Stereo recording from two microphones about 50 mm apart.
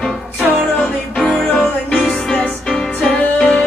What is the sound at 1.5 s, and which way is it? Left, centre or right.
Music, left.